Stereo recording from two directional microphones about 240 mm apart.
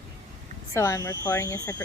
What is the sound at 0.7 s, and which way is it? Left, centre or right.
Speech, centre.